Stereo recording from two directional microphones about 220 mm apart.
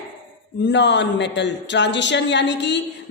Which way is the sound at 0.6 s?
55° left (ahead or behind).